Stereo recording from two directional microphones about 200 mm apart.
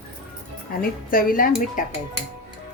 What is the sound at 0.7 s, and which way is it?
Speech, 45° left (ahead or behind).